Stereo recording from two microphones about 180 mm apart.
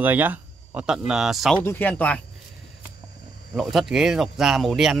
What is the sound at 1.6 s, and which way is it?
Speech, 10° left (ahead or behind).